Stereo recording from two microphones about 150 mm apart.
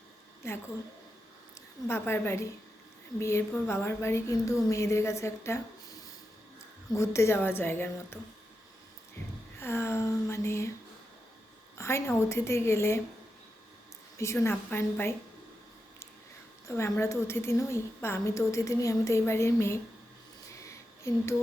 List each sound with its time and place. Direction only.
0.4 s a woman's voice: 20° left (ahead or behind)
1.9 s a woman's voice: 15° left (ahead or behind)
9.6 s a woman's voice: 15° left (ahead or behind)
11.8 s a woman's voice: 20° left (ahead or behind)
14.2 s a woman's voice: 20° left (ahead or behind)
16.6 s a woman's voice: 15° left (ahead or behind)
20.5 s a sound: 20° left (ahead or behind)